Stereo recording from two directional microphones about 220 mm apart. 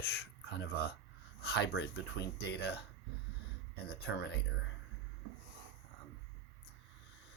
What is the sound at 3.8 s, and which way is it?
Speech, 45° left (ahead or behind).